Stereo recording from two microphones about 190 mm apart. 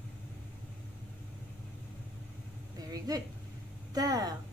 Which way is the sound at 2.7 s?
20° right (ahead or behind).